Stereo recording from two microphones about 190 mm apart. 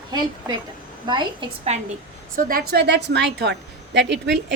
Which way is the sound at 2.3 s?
50° right (ahead or behind).